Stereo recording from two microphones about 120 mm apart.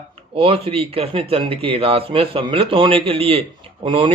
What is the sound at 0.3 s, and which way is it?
Speech, 50° right (ahead or behind).